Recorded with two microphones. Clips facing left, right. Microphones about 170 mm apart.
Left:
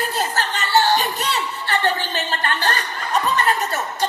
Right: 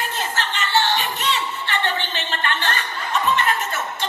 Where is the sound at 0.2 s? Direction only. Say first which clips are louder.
Left 2 dB; 40° left (ahead or behind).